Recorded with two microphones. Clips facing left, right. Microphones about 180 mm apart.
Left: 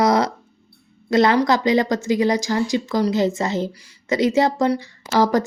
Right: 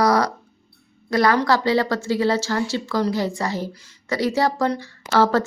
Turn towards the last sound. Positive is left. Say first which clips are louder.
# even
turn(degrees=15)  # may be behind; listen again after turning